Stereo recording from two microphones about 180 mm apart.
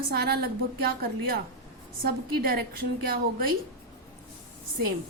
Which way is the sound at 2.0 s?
55° right (ahead or behind).